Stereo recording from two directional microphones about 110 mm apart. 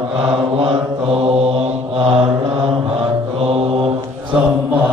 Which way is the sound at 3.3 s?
65° right (ahead or behind).